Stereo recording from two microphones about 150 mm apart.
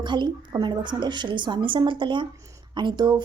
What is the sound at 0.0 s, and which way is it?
Speech, 30° right (ahead or behind).